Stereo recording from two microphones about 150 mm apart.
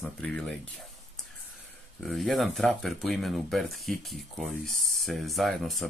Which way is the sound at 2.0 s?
Centre (ahead or behind).